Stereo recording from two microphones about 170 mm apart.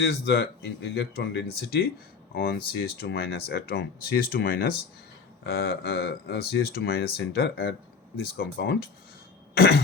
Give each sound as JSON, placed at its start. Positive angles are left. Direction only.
{"t": 0.0, "sound": "speech", "side_deg": 75}